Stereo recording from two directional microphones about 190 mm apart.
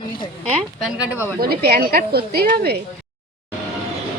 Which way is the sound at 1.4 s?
55° right (ahead or behind).